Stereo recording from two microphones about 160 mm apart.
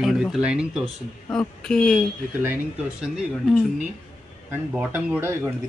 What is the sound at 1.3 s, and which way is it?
Speech, 5° left (ahead or behind).